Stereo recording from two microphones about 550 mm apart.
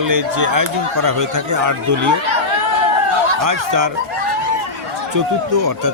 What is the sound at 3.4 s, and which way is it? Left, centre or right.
Speech, right.